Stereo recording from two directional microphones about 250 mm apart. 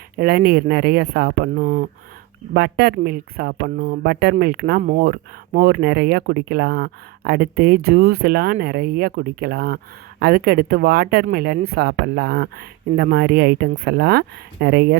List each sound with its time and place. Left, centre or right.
0.2 s speech: right